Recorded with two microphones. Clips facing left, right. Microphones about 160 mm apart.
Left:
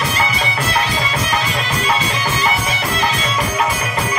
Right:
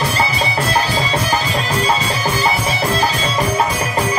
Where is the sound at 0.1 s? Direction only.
35° right (ahead or behind).